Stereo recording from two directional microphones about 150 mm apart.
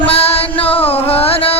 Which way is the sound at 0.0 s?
40° left (ahead or behind).